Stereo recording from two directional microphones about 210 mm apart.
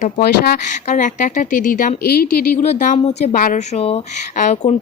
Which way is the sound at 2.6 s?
35° left (ahead or behind).